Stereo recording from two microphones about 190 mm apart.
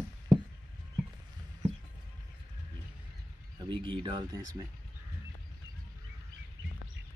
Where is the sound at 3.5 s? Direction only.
25° right (ahead or behind).